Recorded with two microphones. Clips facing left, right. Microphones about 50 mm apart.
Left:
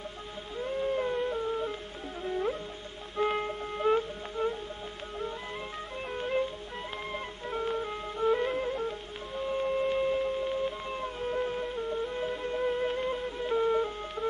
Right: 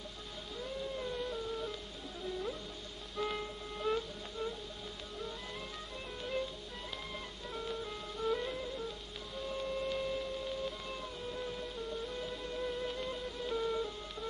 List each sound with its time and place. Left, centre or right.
0.6 s music: left
6.1 s music: left